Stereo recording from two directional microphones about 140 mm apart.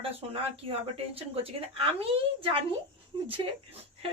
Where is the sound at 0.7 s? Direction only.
45° right (ahead or behind).